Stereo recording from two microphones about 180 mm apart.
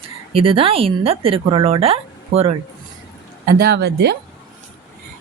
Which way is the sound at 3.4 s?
55° right (ahead or behind).